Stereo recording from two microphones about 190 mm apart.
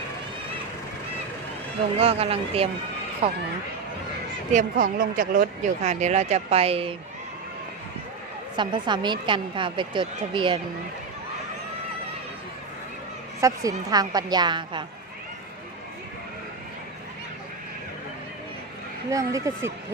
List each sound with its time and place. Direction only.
2.0 s speech: 30° right (ahead or behind)
4.5 s speech: 45° right (ahead or behind)
8.5 s a woman's voice: 25° right (ahead or behind)
13.4 s a woman's voice: 15° right (ahead or behind)
19.1 s speech: 15° right (ahead or behind)